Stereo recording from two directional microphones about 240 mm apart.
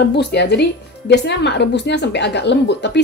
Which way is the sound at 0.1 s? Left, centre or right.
Left.